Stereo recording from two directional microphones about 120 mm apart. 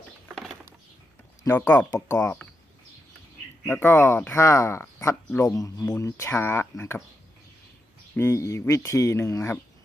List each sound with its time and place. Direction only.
0.3 s bird: centre (ahead or behind)
1.6 s speech: 10° left (ahead or behind)
3.6 s speech: 15° left (ahead or behind)
8.2 s speech: 25° left (ahead or behind)